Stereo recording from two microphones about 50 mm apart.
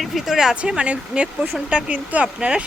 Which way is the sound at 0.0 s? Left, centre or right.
Centre.